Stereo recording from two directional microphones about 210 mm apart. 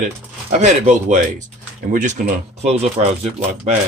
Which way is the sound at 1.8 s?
45° right (ahead or behind).